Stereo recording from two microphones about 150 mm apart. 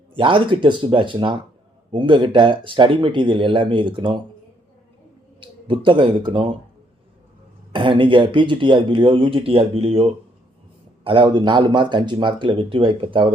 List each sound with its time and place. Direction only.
0.2 s speech: 35° right (ahead or behind)
5.4 s speech: 35° right (ahead or behind)
7.7 s speech: 35° right (ahead or behind)